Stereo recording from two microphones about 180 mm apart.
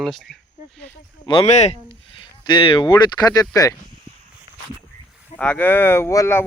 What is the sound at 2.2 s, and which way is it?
Speech, 25° left (ahead or behind).